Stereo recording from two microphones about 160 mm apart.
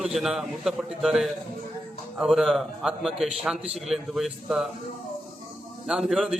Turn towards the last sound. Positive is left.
turn(degrees=-5)  # may be behind; listen again after turning